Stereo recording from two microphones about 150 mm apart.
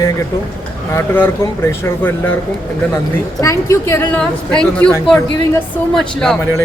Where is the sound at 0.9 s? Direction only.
15° left (ahead or behind).